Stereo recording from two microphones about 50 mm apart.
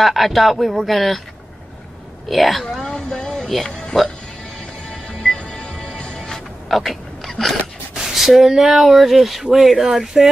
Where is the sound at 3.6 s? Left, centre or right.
Centre.